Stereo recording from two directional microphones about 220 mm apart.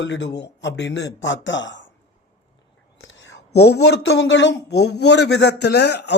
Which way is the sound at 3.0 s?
55° left (ahead or behind).